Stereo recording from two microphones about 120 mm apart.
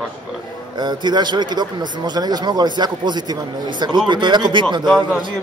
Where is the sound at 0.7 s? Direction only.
35° right (ahead or behind).